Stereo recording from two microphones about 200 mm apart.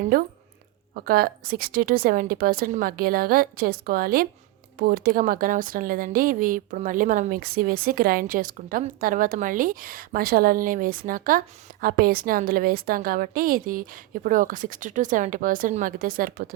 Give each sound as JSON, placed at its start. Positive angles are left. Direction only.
{"t": 0.1, "sound": "speech", "side_deg": -45}